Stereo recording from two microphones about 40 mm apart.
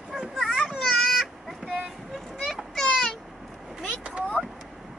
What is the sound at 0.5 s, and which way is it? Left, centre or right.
Baby cry, centre.